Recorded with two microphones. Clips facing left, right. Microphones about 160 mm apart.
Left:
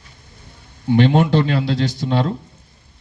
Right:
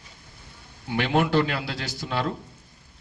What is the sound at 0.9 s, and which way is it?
A man's voice, 25° left (ahead or behind).